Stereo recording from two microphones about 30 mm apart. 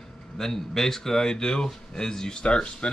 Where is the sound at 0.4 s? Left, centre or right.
Centre.